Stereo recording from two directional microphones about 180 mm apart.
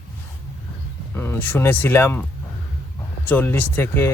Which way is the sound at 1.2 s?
10° left (ahead or behind).